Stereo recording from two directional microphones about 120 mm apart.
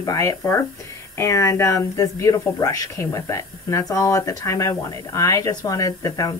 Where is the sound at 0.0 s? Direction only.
30° left (ahead or behind).